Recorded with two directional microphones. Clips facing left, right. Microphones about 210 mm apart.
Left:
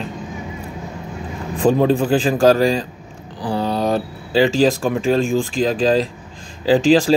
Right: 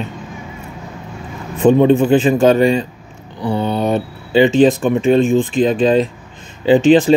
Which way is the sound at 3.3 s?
35° left (ahead or behind).